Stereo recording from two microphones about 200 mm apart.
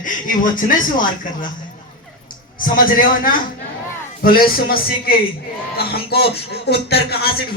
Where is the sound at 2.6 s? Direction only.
45° left (ahead or behind).